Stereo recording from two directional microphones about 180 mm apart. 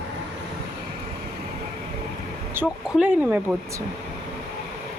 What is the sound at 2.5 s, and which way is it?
Speech, 10° right (ahead or behind).